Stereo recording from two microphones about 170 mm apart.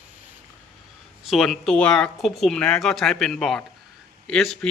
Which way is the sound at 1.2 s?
Centre (ahead or behind).